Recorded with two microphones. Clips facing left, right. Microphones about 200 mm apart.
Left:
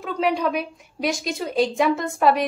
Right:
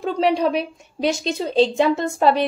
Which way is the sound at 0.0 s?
30° right (ahead or behind).